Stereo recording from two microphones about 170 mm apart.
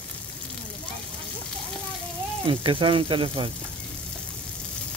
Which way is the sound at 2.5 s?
30° right (ahead or behind).